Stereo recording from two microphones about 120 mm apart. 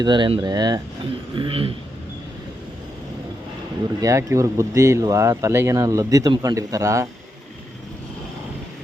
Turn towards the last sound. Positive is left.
turn(degrees=-25)  # may be behind; listen again after turning